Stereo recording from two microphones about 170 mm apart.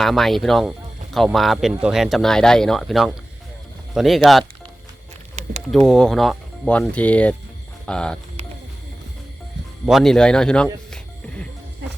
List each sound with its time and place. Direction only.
0.0 s speech: centre (ahead or behind)
5.7 s speech: centre (ahead or behind)
9.8 s speech: centre (ahead or behind)